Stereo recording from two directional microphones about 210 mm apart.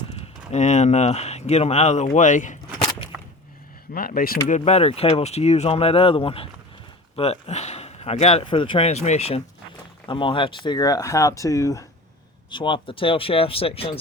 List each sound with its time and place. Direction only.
0.1 s speech: 30° left (ahead or behind)
2.0 s a sound: 35° left (ahead or behind)
3.9 s speech: 45° left (ahead or behind)
4.4 s speech: 30° left (ahead or behind)